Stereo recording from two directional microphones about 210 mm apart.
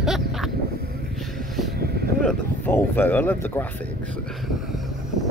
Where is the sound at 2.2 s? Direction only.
10° left (ahead or behind).